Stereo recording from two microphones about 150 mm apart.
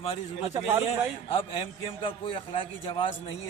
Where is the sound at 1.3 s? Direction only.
35° left (ahead or behind).